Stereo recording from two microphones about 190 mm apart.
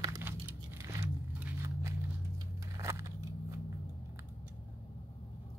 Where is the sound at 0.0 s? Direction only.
15° right (ahead or behind).